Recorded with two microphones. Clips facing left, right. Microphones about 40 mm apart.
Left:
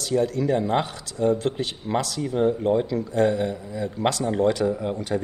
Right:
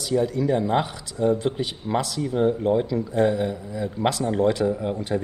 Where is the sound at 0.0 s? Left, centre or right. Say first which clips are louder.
Even; centre.